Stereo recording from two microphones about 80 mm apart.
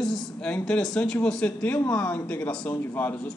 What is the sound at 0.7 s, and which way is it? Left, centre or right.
Speech, centre.